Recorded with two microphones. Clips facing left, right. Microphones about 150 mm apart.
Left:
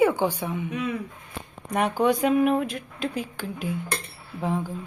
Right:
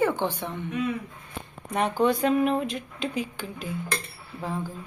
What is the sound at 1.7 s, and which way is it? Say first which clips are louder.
Speech: left 1 dB; 10° left (ahead or behind).